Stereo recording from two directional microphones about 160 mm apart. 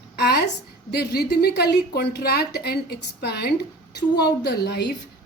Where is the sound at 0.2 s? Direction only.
90° left.